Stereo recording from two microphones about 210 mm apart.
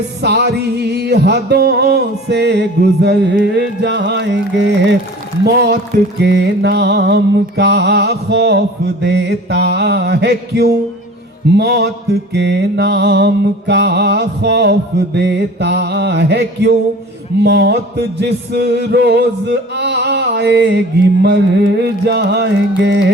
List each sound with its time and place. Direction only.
0.2 s music: 50° right (ahead or behind)
6.2 s music: 55° right (ahead or behind)